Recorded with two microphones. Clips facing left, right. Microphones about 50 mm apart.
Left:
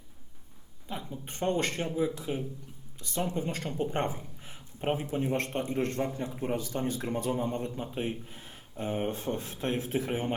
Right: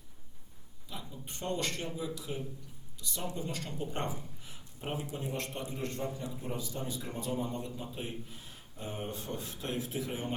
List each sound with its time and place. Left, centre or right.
0.9 s speech: left